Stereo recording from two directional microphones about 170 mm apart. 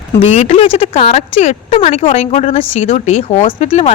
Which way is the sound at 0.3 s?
40° left (ahead or behind).